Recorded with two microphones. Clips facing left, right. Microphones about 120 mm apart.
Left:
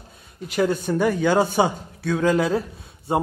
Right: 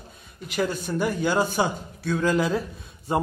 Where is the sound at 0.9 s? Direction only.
55° left (ahead or behind).